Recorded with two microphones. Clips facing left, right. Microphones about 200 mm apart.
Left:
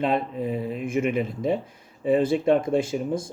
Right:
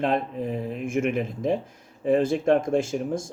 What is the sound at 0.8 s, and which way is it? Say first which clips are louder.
Speech: even; 50° right (ahead or behind).